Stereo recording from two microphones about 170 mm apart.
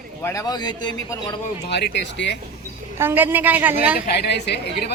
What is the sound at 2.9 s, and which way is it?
Speech, 10° right (ahead or behind).